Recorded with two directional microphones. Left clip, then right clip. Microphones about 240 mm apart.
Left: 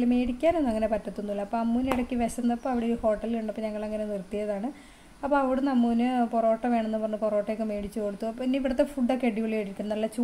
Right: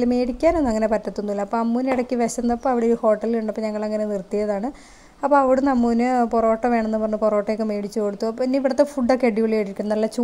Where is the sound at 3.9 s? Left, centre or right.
Centre.